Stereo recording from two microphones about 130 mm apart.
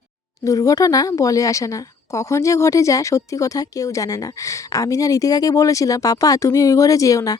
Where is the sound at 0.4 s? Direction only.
25° left (ahead or behind).